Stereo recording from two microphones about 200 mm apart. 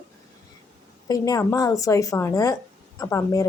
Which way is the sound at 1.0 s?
20° left (ahead or behind).